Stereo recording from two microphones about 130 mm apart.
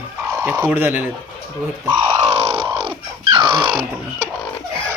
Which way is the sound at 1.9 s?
40° right (ahead or behind).